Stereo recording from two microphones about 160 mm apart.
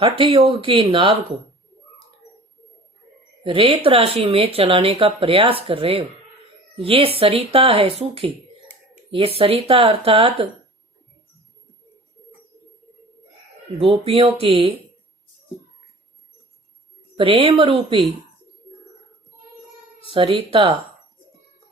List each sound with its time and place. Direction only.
0.0 s speech: 35° right (ahead or behind)
3.4 s speech: 35° right (ahead or behind)
9.4 s speech: 35° right (ahead or behind)
13.7 s speech: 35° right (ahead or behind)
17.2 s speech: 35° right (ahead or behind)
20.1 s speech: 35° right (ahead or behind)